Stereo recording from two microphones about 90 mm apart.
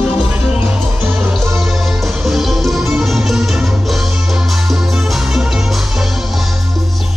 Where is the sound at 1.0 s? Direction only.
25° right (ahead or behind).